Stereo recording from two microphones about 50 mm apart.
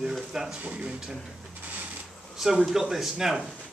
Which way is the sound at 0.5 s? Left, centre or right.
Right.